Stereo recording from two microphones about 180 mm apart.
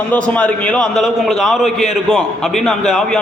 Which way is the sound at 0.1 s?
5° left (ahead or behind).